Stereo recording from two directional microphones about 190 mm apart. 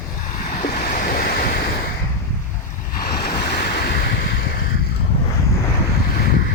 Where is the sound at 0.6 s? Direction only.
50° left (ahead or behind).